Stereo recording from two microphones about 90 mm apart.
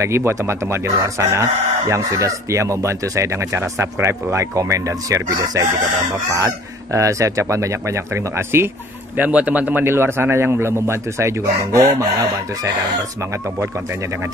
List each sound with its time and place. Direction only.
0.0 s speech: 30° right (ahead or behind)
9.1 s a man's voice: 15° right (ahead or behind); by 12.1 s 35° right (ahead or behind)